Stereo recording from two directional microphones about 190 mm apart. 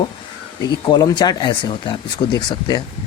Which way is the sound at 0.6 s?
20° left (ahead or behind).